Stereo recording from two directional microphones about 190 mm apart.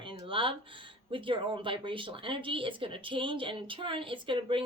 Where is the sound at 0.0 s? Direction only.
25° right (ahead or behind).